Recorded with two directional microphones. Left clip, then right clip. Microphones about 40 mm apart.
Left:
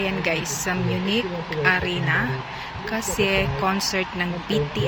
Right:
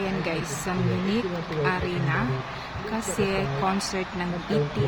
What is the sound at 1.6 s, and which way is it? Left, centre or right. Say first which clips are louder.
Speech: left 7 dB; left.